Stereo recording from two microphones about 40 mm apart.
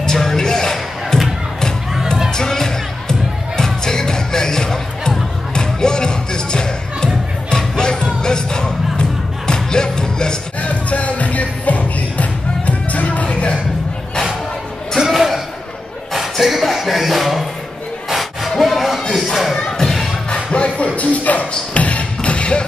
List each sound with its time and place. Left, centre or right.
0.0 s music: centre
2.3 s music: centre
10.6 s music: left
15.0 s a sound: centre
18.6 s a sound: centre
19.8 s music: centre
20.5 s beatboxing: left